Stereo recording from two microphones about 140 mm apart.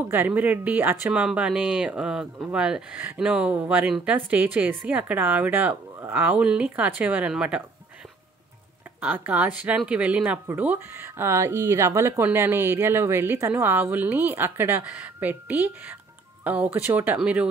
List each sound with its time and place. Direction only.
0.1 s speech: 15° right (ahead or behind)
9.0 s speech: 10° right (ahead or behind)